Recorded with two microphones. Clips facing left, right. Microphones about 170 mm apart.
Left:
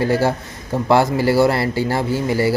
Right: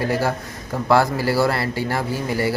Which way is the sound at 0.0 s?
25° left (ahead or behind).